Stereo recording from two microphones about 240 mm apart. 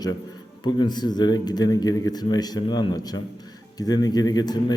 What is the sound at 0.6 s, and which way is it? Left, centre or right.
Speech, centre.